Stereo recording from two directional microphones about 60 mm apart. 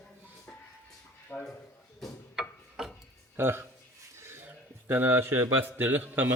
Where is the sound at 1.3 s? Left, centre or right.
Left.